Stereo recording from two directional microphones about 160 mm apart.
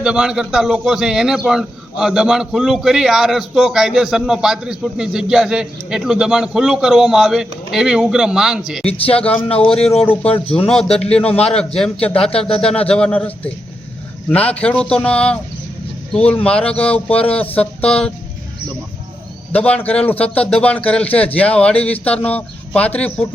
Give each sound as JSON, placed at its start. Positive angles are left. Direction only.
{"t": 0.0, "sound": "a man's voice", "side_deg": -5}
{"t": 9.0, "sound": "speech", "side_deg": 35}
{"t": 9.6, "sound": "a man's voice", "side_deg": 5}
{"t": 19.5, "sound": "a man's voice", "side_deg": 10}